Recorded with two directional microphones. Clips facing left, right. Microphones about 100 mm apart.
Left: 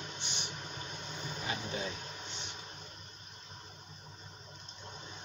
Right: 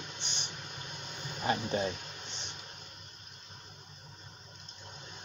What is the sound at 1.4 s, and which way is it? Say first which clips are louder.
Speech: right 8 dB; 45° right (ahead or behind).